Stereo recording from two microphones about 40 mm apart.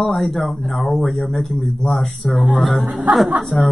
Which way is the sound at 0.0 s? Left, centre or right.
Centre.